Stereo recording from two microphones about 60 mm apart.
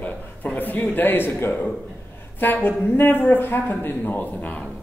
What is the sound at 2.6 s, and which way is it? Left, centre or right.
Speech, left.